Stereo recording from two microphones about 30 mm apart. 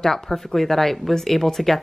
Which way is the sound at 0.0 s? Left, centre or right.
Centre.